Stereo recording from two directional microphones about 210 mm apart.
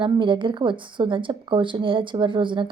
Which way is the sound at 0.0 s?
25° right (ahead or behind).